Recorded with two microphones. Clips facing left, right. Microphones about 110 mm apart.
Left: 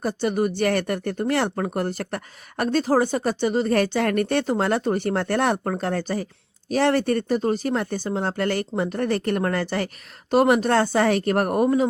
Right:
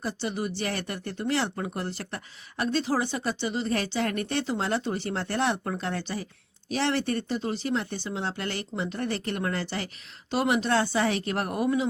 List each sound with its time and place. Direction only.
0.0 s speech: 50° left (ahead or behind)